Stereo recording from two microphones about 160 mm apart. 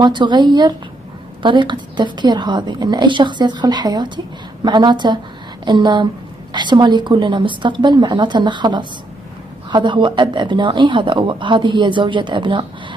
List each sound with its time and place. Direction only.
0.0 s a woman's voice: 30° right (ahead or behind)